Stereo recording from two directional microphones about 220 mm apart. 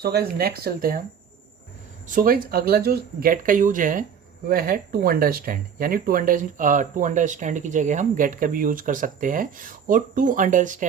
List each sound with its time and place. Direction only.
0.0 s speech: 45° right (ahead or behind)
2.0 s speech: 40° right (ahead or behind)